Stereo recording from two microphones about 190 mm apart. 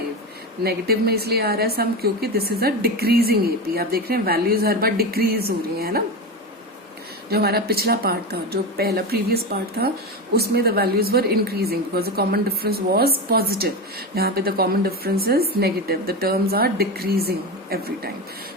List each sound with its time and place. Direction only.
0.6 s a woman's voice: 55° right (ahead or behind)
7.3 s a woman's voice: 55° right (ahead or behind)